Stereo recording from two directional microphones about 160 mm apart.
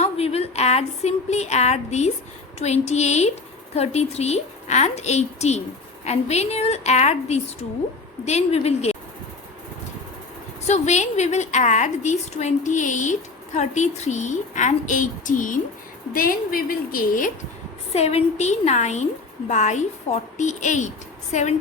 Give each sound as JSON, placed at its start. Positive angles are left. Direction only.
{"t": 0.0, "sound": "a woman's voice", "side_deg": 40}
{"t": 10.7, "sound": "a woman's voice", "side_deg": 45}
{"t": 17.9, "sound": "a woman's voice", "side_deg": 40}